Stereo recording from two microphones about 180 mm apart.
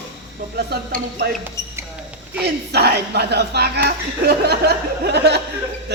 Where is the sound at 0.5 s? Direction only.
65° right (ahead or behind).